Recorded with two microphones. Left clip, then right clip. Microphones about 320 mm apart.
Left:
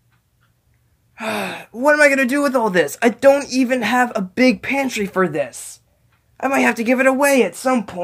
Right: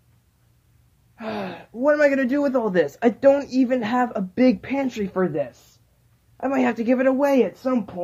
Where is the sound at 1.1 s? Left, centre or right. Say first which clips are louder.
Left 7 dB; left.